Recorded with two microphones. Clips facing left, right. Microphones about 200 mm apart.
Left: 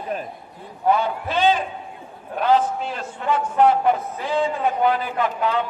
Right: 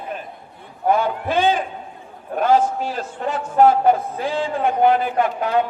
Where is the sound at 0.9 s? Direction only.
50° right (ahead or behind).